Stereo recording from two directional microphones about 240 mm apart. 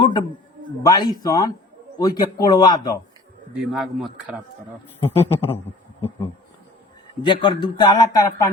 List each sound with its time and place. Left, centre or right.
0.0 s a sound: centre
0.8 s a man's voice: centre
3.5 s speech: centre
4.9 s a man's voice: centre
7.2 s a man's voice: centre